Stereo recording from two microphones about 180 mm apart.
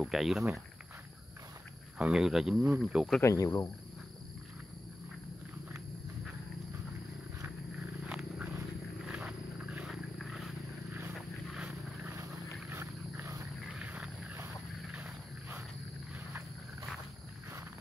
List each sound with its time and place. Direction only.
0.0 s speech: centre (ahead or behind)
2.0 s speech: 5° right (ahead or behind)
3.2 s speech: 20° left (ahead or behind)
8.1 s a sound: 5° right (ahead or behind)
11.1 s vehicle: 5° right (ahead or behind)
13.7 s wild animals: 5° right (ahead or behind)